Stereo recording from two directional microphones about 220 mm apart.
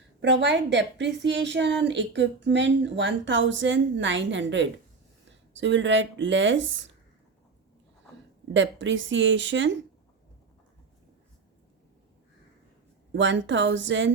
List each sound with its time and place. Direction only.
0.2 s a woman's voice: 55° right (ahead or behind)
8.5 s a woman's voice: 55° right (ahead or behind)
13.1 s a woman's voice: 55° right (ahead or behind)